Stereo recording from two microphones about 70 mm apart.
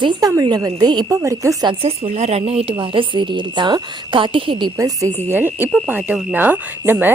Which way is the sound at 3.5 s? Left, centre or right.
Right.